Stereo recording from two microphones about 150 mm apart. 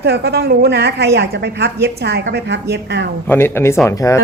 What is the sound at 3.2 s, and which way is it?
Speech, 15° left (ahead or behind).